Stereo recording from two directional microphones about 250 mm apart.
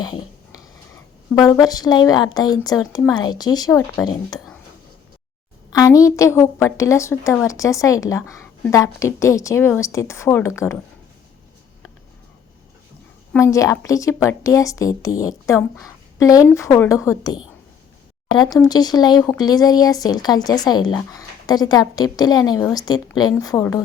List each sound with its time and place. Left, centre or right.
1.6 s a woman's voice: centre
5.7 s a woman's voice: centre
13.3 s a woman's voice: centre